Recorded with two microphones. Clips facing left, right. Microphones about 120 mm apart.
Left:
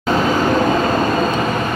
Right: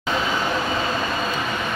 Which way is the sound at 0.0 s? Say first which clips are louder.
Left 8 dB; 45° left (ahead or behind).